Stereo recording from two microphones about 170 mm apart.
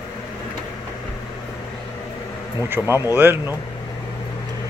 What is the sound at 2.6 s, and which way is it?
Speech, 15° right (ahead or behind).